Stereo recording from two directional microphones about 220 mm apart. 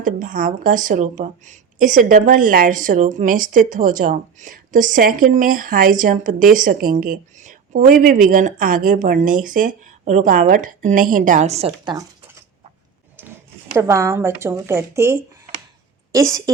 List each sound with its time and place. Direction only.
0.0 s a woman's voice: 35° right (ahead or behind)
13.2 s a sound: 10° right (ahead or behind)
13.7 s a woman's voice: 15° right (ahead or behind)